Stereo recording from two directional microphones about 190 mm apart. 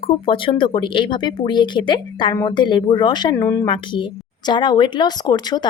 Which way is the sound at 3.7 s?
25° left (ahead or behind).